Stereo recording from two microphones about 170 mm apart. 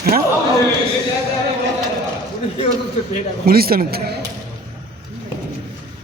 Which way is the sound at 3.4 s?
60° right (ahead or behind).